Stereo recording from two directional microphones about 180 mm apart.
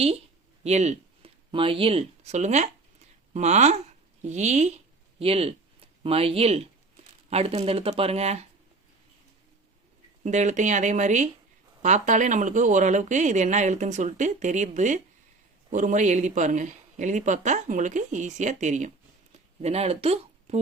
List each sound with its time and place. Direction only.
0.6 s speech: 40° right (ahead or behind)
10.2 s speech: 40° right (ahead or behind)